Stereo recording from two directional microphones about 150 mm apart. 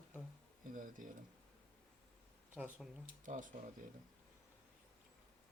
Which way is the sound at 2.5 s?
5° right (ahead or behind).